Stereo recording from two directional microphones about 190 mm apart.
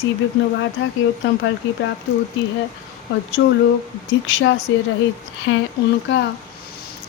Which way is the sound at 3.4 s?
75° left (ahead or behind).